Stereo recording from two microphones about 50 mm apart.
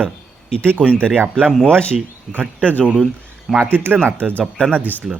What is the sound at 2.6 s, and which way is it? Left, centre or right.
Speech, left.